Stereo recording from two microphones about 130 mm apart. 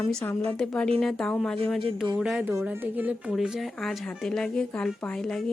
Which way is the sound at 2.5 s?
20° right (ahead or behind).